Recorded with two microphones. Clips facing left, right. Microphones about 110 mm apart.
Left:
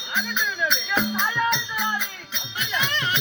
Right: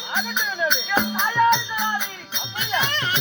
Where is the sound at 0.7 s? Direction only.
35° right (ahead or behind).